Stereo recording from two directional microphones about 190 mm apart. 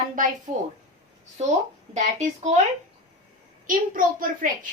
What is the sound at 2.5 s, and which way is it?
Speech, 35° right (ahead or behind).